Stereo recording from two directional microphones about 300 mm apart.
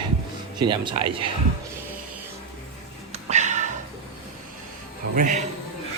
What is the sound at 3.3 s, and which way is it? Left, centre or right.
Music, right.